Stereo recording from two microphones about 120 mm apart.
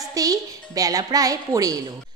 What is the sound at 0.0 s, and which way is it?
A woman's voice, 30° right (ahead or behind).